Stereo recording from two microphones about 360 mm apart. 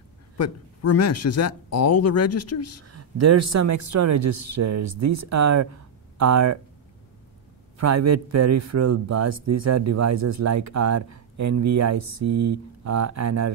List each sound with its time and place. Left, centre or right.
0.4 s speech: left
2.9 s speech: right
7.7 s speech: right